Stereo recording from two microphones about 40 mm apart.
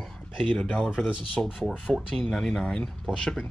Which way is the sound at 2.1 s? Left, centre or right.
Centre.